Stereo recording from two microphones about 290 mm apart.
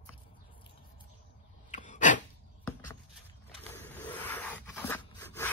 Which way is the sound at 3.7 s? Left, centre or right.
Centre.